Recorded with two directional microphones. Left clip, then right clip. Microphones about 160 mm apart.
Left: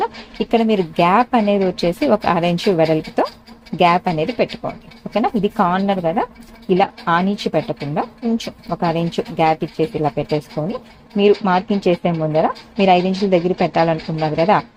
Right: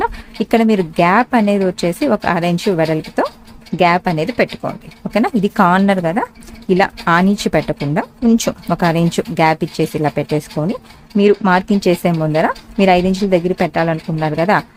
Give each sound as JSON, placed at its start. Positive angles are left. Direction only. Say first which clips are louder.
{"t": 0.0, "sound": "a woman's voice", "louder": "right 2 dB", "side_deg": -15}